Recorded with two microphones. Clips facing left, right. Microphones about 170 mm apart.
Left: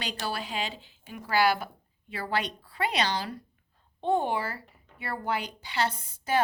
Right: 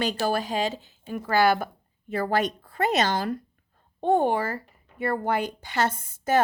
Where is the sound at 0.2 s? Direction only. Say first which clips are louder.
Right 8 dB; 45° right (ahead or behind).